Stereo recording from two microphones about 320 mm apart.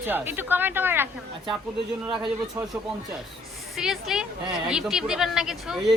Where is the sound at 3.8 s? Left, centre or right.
Centre.